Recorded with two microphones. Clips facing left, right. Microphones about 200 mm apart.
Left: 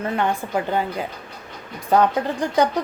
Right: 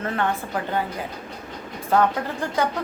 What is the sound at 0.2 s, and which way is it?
Speech, 15° left (ahead or behind).